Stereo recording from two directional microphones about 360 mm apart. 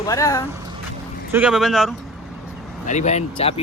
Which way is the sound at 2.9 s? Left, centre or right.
Centre.